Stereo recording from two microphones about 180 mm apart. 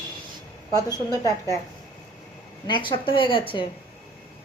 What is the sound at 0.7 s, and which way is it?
Speech, 20° left (ahead or behind).